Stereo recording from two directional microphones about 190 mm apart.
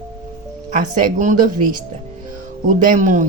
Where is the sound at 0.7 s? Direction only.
40° right (ahead or behind).